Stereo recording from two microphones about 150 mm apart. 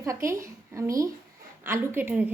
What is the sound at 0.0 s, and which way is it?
A woman's voice, 20° right (ahead or behind).